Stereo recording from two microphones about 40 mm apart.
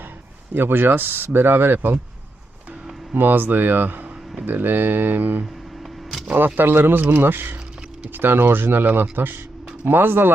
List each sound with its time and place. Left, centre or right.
0.5 s speech: right
3.2 s speech: right